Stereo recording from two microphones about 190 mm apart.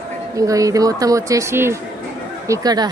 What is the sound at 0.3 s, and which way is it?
Speech, 15° right (ahead or behind).